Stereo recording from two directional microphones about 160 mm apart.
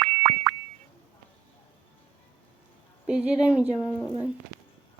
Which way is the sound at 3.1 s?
5° right (ahead or behind).